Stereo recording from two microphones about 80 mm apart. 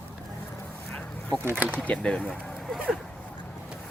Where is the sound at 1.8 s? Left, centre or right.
Centre.